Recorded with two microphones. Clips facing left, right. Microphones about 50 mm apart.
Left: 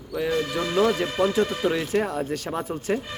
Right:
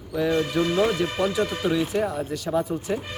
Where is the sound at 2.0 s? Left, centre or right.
Left.